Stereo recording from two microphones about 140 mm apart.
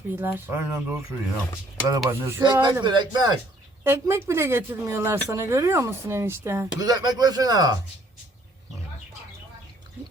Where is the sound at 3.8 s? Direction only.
20° right (ahead or behind).